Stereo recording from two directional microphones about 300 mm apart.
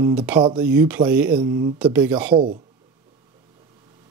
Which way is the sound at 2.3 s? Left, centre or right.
Centre.